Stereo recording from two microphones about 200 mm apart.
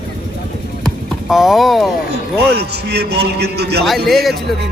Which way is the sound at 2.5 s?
55° right (ahead or behind).